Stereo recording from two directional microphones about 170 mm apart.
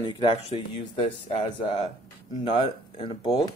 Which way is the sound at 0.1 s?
25° left (ahead or behind).